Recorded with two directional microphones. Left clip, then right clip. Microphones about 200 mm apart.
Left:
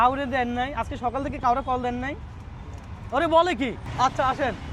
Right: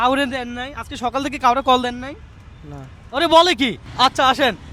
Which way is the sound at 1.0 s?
40° right (ahead or behind).